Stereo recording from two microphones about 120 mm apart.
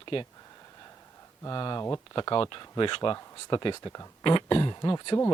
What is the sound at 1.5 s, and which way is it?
Speech, 40° left (ahead or behind).